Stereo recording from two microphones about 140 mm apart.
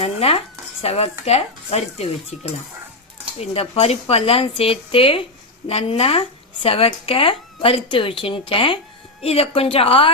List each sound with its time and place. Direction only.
0.0 s dishes: 45° left (ahead or behind)
1.2 s speech: 50° left (ahead or behind)